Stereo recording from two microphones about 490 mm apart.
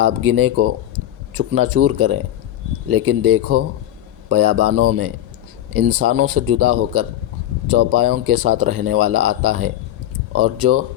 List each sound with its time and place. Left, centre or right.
0.2 s speech: right